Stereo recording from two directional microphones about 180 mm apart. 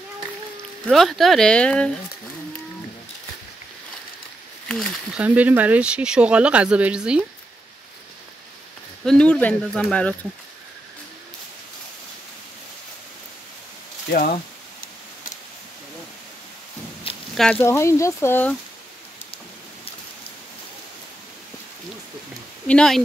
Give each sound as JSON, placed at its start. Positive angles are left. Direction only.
{"t": 0.8, "sound": "speech", "side_deg": 0}
{"t": 4.6, "sound": "speech", "side_deg": 0}
{"t": 9.0, "sound": "speech", "side_deg": 5}
{"t": 17.1, "sound": "a sound", "side_deg": 30}
{"t": 17.4, "sound": "speech", "side_deg": 5}
{"t": 17.6, "sound": "speech", "side_deg": 15}
{"t": 22.7, "sound": "speech", "side_deg": 5}